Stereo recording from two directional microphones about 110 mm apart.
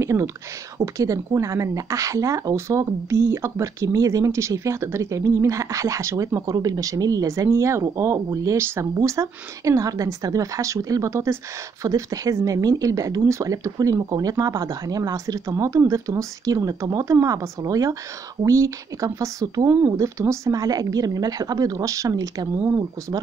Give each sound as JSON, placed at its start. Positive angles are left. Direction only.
{"t": 0.0, "sound": "speech", "side_deg": -25}